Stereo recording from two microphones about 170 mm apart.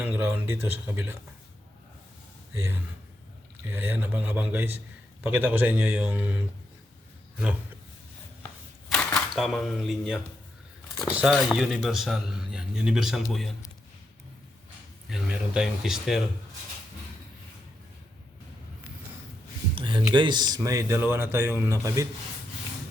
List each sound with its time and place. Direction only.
0.0 s speech: 10° right (ahead or behind)
2.5 s a man's voice: 15° right (ahead or behind)
8.9 s speech: centre (ahead or behind)
15.1 s speech: 5° right (ahead or behind)
19.7 s speech: 30° right (ahead or behind)